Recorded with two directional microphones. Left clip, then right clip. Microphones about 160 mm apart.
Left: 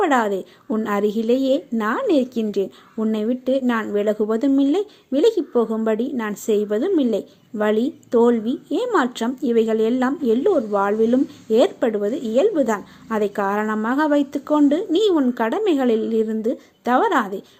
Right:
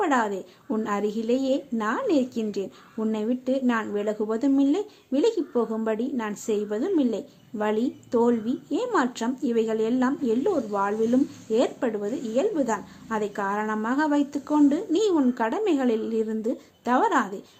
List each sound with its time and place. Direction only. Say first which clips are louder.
0.0 s a woman's voice: left 5 dB; 25° left (ahead or behind)